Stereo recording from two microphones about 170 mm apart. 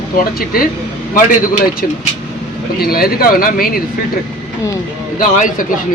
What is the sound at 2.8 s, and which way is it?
Speech, 60° left (ahead or behind).